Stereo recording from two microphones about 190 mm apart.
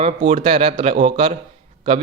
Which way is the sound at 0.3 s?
30° right (ahead or behind).